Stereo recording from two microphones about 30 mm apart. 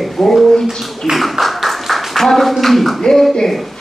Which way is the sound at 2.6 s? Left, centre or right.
Centre.